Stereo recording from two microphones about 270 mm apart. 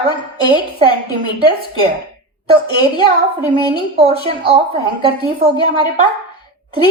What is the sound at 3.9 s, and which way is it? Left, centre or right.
A woman's voice, right.